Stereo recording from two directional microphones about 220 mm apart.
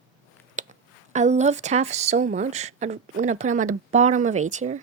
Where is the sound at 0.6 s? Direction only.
35° right (ahead or behind).